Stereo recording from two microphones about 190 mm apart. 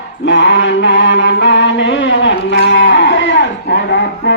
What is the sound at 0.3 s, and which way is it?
Mantra, 70° left (ahead or behind).